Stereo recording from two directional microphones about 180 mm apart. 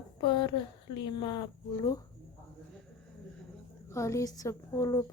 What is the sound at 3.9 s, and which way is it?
A woman's voice, 15° left (ahead or behind).